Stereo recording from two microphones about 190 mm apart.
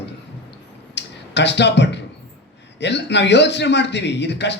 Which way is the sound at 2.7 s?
65° left (ahead or behind).